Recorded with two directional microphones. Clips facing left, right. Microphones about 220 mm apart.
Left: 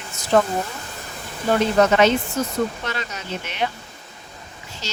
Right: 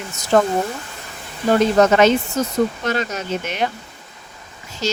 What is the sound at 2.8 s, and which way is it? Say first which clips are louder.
Speech: right 7 dB; 45° right (ahead or behind).